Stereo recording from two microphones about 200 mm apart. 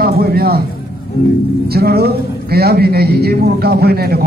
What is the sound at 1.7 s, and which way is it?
A man's voice, 50° right (ahead or behind).